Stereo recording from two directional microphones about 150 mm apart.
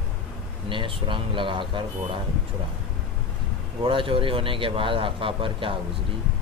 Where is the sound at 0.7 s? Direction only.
35° right (ahead or behind).